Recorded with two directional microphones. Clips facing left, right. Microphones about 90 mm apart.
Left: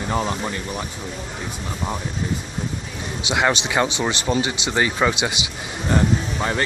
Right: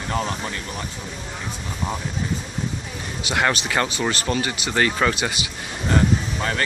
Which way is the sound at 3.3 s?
15° left (ahead or behind).